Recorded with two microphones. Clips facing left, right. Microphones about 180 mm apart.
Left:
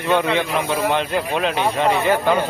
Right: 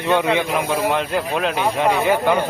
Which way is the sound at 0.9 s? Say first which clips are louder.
Even; centre (ahead or behind).